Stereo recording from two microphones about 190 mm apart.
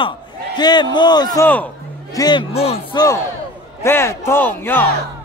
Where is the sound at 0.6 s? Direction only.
20° left (ahead or behind).